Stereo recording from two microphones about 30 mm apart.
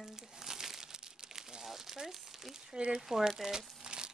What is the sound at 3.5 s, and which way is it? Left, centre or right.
Crumpling, right.